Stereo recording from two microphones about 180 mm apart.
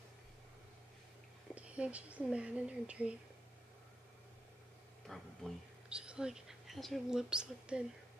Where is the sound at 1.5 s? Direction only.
5° right (ahead or behind).